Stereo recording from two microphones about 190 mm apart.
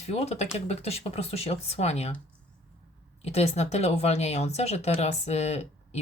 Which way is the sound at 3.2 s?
35° left (ahead or behind).